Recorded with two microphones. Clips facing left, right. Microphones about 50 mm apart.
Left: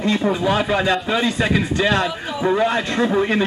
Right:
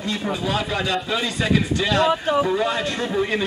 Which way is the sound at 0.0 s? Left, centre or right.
Left.